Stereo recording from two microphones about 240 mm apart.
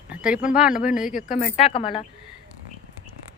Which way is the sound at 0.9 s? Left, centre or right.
Centre.